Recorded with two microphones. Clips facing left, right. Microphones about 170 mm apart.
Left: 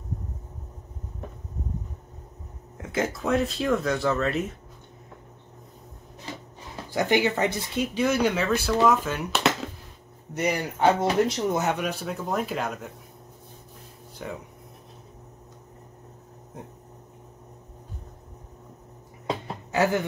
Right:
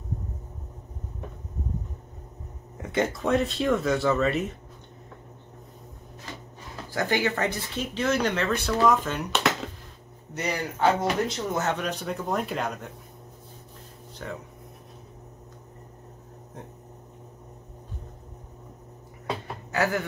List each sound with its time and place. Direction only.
2.8 s speech: centre (ahead or behind)
6.9 s speech: 20° left (ahead or behind)
10.3 s speech: 20° left (ahead or behind); by 12.9 s centre (ahead or behind)
14.2 s speech: 10° left (ahead or behind)
19.4 s music: 20° left (ahead or behind)